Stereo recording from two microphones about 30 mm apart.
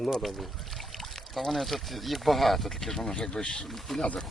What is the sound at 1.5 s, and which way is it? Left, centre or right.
Speech, centre.